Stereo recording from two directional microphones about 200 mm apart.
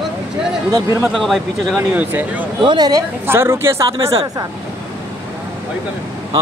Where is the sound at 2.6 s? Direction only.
20° right (ahead or behind).